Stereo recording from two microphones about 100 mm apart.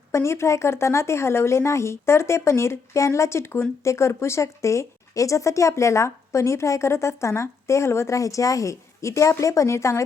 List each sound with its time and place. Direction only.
0.1 s speech: 30° left (ahead or behind)